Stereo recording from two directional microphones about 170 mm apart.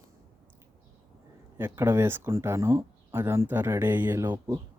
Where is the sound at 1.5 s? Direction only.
15° right (ahead or behind).